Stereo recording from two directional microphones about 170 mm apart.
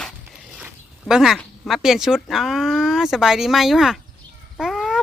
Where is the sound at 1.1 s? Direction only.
Centre (ahead or behind).